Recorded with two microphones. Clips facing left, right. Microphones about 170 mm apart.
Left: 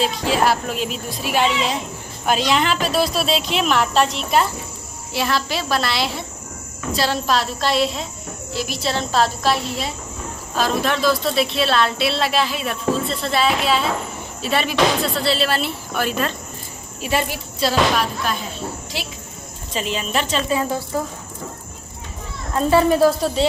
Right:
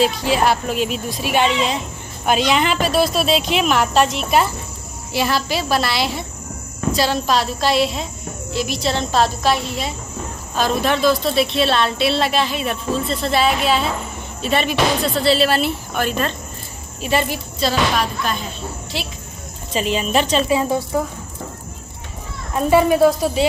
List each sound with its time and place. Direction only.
0.0 s a woman's voice: centre (ahead or behind)
19.7 s a woman's voice: 15° right (ahead or behind)
22.5 s a woman's voice: 15° right (ahead or behind)